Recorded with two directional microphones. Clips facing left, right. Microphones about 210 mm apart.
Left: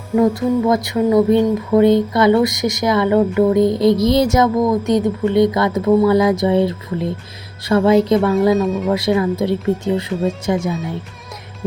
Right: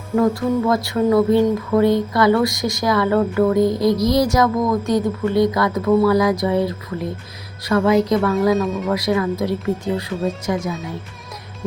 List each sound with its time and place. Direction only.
0.2 s speech: 20° left (ahead or behind)
8.5 s speech: centre (ahead or behind)
8.9 s speech: 25° left (ahead or behind)